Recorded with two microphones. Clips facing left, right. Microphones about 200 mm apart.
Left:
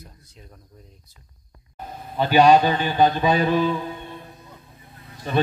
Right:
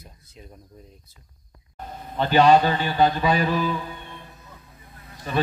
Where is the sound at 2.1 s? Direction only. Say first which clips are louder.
Left 1 dB; 10° left (ahead or behind).